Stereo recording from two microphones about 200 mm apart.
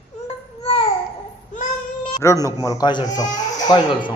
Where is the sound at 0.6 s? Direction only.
25° left (ahead or behind).